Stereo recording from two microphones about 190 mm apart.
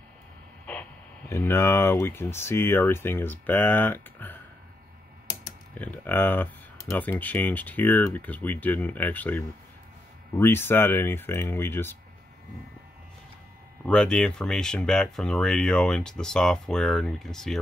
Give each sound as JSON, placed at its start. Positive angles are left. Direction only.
{"t": 1.3, "sound": "speech", "side_deg": 15}
{"t": 5.8, "sound": "speech", "side_deg": 10}
{"t": 10.4, "sound": "speech", "side_deg": 10}
{"t": 13.8, "sound": "speech", "side_deg": 5}